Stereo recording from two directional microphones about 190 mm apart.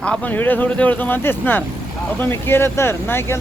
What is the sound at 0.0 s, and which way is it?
Speech, 5° left (ahead or behind).